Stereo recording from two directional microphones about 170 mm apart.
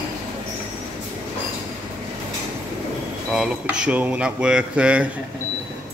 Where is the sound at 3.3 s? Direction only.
5° right (ahead or behind).